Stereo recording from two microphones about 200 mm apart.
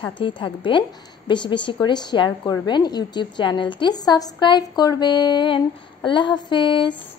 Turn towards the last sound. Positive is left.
turn(degrees=25)  # may be behind; listen again after turning